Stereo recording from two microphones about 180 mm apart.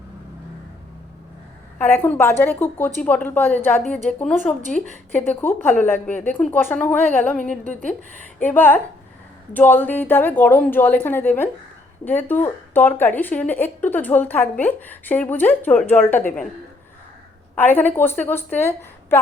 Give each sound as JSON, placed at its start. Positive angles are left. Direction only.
{"t": 1.8, "sound": "speech", "side_deg": 10}
{"t": 17.5, "sound": "speech", "side_deg": 10}